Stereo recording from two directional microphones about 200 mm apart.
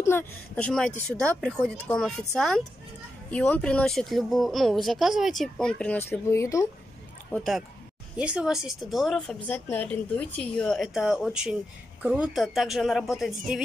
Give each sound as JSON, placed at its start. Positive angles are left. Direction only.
{"t": 0.0, "sound": "speech", "side_deg": 10}
{"t": 7.3, "sound": "speech", "side_deg": 0}